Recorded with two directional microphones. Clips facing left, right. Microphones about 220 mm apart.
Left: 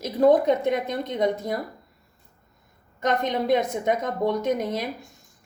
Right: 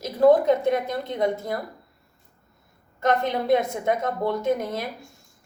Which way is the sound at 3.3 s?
20° left (ahead or behind).